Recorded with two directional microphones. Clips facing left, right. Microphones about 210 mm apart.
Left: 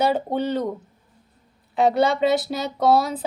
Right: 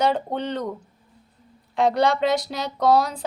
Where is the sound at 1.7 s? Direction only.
5° left (ahead or behind).